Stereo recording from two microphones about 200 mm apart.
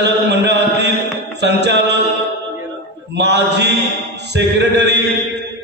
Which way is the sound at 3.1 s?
60° right (ahead or behind).